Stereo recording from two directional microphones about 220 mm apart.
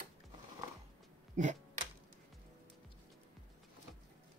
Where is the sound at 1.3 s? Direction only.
35° right (ahead or behind).